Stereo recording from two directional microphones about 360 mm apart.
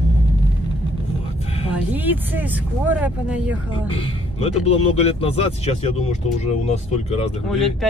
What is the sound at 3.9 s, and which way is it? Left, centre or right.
Speech, centre.